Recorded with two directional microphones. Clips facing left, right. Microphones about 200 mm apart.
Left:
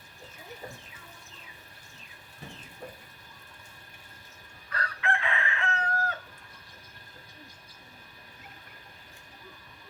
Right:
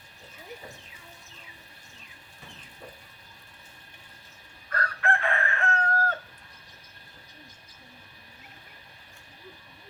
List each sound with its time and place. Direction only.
4.7 s chicken: 50° right (ahead or behind)